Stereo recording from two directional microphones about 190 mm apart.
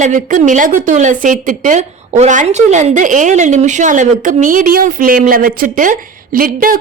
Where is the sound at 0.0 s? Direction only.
40° right (ahead or behind).